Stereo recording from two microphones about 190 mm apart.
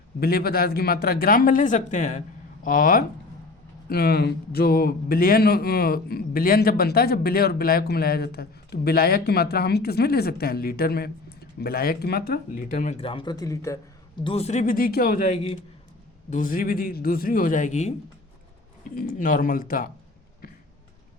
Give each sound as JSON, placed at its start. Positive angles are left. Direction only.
{"t": 0.2, "sound": "speech", "side_deg": 55}
{"t": 14.3, "sound": "speech", "side_deg": 35}
{"t": 18.9, "sound": "speech", "side_deg": 50}